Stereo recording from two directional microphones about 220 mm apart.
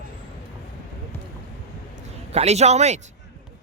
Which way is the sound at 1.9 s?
30° right (ahead or behind).